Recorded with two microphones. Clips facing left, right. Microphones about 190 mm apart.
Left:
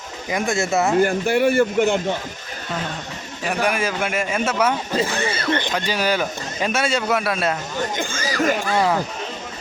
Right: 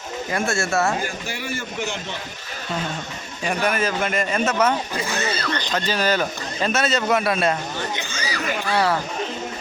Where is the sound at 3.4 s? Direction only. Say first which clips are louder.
Left 1 dB; 10° left (ahead or behind).